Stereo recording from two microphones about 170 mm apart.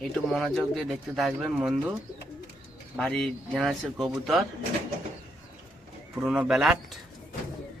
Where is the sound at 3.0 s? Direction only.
5° left (ahead or behind).